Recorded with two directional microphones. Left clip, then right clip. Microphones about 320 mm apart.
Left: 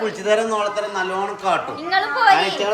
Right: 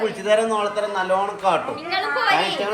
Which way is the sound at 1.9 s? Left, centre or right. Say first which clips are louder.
Left 5 dB; centre.